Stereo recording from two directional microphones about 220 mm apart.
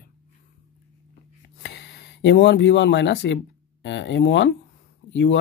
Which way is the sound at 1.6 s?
50° left (ahead or behind).